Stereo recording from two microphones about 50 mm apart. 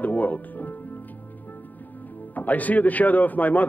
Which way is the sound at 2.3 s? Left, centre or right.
Left.